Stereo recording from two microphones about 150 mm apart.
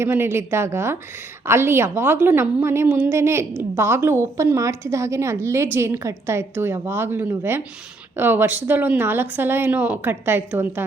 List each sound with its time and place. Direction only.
0.0 s a woman's voice: 15° right (ahead or behind)